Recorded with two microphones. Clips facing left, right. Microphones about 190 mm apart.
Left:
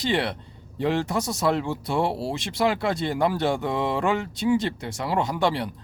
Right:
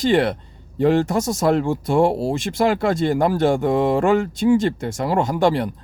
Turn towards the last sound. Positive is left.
turn(degrees=-45)  # may be behind; listen again after turning